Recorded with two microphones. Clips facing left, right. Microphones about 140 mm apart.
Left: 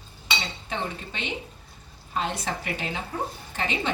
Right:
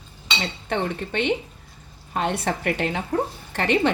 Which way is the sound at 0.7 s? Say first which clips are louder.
Right 8 dB; 60° right (ahead or behind).